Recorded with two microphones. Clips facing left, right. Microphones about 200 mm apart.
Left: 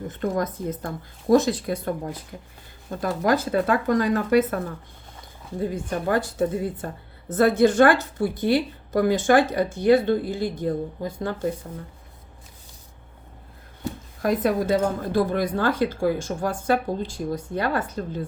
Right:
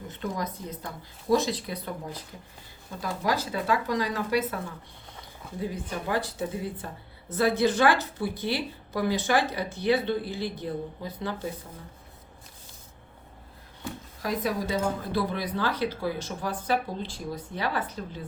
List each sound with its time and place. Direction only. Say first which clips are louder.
0.1 s speech: left 6 dB; 50° left (ahead or behind)
14.2 s speech: left 7 dB; 55° left (ahead or behind)